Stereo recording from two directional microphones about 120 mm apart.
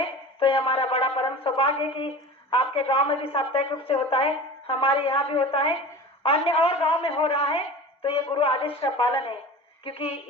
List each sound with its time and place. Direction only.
0.0 s a woman's voice: 50° left (ahead or behind)